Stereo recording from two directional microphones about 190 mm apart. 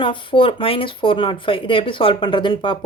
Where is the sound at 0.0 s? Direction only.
25° left (ahead or behind).